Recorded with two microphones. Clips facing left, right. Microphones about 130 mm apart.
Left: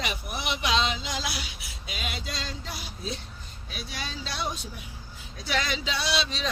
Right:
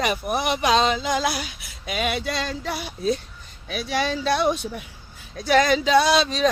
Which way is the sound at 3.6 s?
80° right.